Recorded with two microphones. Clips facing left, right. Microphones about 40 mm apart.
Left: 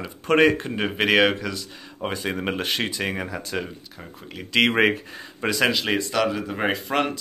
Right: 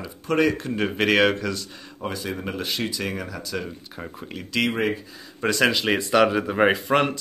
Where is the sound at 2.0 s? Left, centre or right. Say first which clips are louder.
Left 2 dB; left.